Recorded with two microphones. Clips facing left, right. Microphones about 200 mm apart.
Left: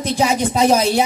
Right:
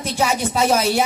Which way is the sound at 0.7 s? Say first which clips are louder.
Left 1 dB; 15° left (ahead or behind).